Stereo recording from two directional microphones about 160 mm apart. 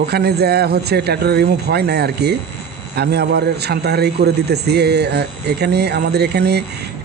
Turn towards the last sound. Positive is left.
turn(degrees=-90)